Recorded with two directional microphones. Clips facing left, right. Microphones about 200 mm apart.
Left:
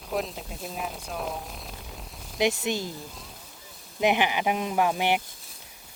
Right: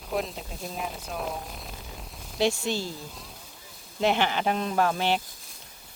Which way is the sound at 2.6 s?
20° left (ahead or behind).